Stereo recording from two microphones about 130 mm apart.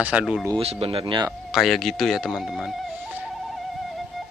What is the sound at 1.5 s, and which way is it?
Speech, centre (ahead or behind).